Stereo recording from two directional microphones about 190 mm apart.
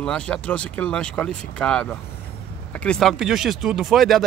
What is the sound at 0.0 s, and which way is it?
Speech, 5° left (ahead or behind).